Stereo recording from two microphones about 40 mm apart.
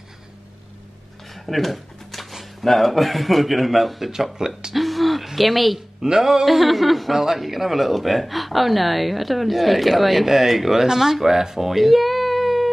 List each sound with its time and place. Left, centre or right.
1.3 s speech: centre
4.7 s hoot: centre
6.0 s speech: centre
6.4 s speech: centre